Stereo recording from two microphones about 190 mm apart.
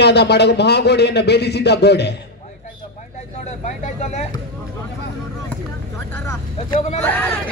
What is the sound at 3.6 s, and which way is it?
Speech, 35° left (ahead or behind).